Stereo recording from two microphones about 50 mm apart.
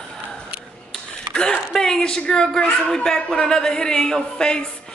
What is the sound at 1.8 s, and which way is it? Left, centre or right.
A man's voice, centre.